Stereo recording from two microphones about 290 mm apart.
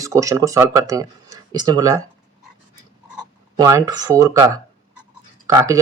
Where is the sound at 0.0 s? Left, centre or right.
Centre.